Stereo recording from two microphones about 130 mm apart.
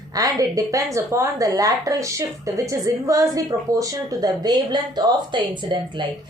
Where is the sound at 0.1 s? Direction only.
25° right (ahead or behind).